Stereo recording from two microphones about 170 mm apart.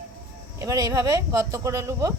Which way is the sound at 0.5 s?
20° right (ahead or behind).